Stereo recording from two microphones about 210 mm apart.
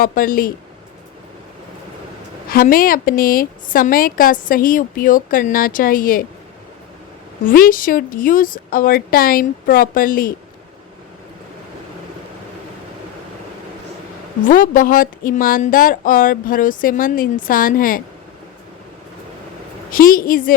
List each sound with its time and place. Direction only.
0.0 s a woman's voice: 40° left (ahead or behind)
2.5 s a woman's voice: 45° left (ahead or behind)
7.4 s a woman's voice: 40° left (ahead or behind)
14.4 s a woman's voice: 40° left (ahead or behind)
19.9 s a woman's voice: 40° left (ahead or behind)